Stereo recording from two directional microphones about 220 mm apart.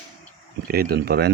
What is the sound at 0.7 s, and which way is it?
Speech, 45° right (ahead or behind).